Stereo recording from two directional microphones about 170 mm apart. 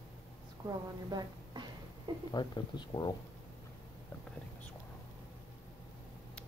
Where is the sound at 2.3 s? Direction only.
25° left (ahead or behind).